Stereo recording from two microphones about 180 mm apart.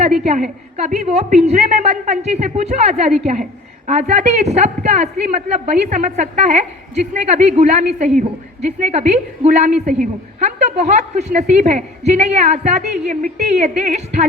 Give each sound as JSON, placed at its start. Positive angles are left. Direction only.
{"t": 0.0, "sound": "a woman's voice", "side_deg": -40}